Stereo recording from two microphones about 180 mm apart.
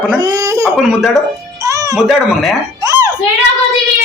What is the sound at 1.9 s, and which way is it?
Speech, centre (ahead or behind).